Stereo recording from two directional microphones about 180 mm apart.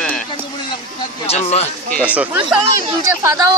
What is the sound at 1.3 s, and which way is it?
Speech, 35° left (ahead or behind).